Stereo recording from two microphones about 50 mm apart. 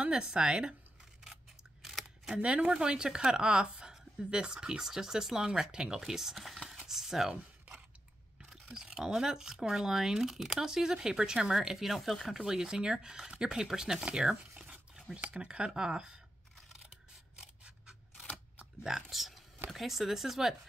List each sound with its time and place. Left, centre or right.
0.0 s speech: centre
1.2 s scissors: centre
2.3 s speech: right; by 6.8 s centre
6.9 s a sound: centre
8.4 s speech: centre
16.6 s a sound: centre
17.4 s scissors: centre
18.8 s speech: centre